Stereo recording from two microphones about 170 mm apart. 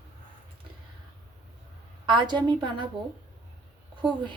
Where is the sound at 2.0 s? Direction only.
25° right (ahead or behind).